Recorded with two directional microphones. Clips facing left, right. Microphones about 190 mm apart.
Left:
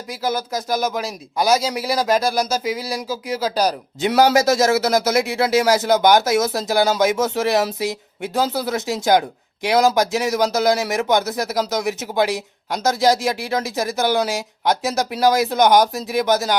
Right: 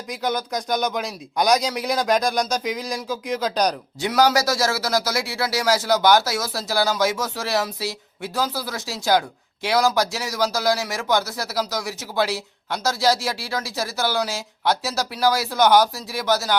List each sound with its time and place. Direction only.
0.1 s speech: 5° left (ahead or behind)
4.0 s a man's voice: 25° left (ahead or behind)